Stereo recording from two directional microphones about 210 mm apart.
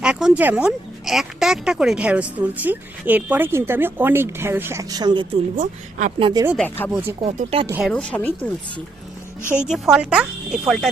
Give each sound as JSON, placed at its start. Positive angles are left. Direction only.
{"t": 0.0, "sound": "speech", "side_deg": -5}
{"t": 5.5, "sound": "speech", "side_deg": -35}
{"t": 6.6, "sound": "speech", "side_deg": 10}
{"t": 6.9, "sound": "speech", "side_deg": -10}
{"t": 7.3, "sound": "speech", "side_deg": -30}
{"t": 7.7, "sound": "speech", "side_deg": 0}
{"t": 9.6, "sound": "speech", "side_deg": 0}